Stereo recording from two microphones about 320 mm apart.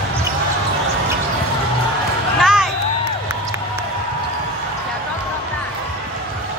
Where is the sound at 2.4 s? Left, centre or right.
Centre.